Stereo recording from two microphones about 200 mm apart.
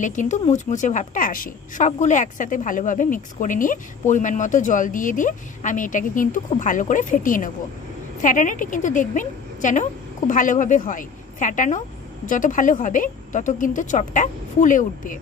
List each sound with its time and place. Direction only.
0.0 s a woman's voice: 40° left (ahead or behind)